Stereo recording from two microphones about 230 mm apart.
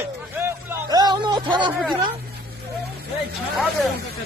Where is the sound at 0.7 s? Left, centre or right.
Centre.